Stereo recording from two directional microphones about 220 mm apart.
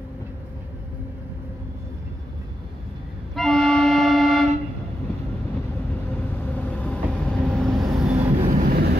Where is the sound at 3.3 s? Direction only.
Centre (ahead or behind).